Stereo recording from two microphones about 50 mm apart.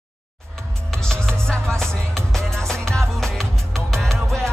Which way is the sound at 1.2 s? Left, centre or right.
Centre.